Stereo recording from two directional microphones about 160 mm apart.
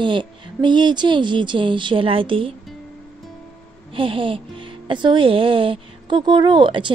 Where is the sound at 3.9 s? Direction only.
35° right (ahead or behind).